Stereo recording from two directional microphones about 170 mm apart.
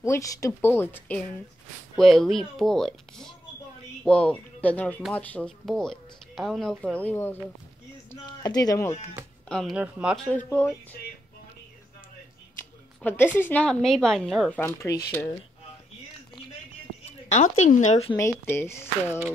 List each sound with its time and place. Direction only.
0.0 s a woman's voice: 20° left (ahead or behind)
8.3 s speech: 25° left (ahead or behind)
9.5 s speech: centre (ahead or behind)
13.0 s speech: 10° left (ahead or behind)
14.8 s speech: 15° left (ahead or behind)
17.0 s a woman's voice: 45° left (ahead or behind)
18.1 s a woman's voice: 15° left (ahead or behind)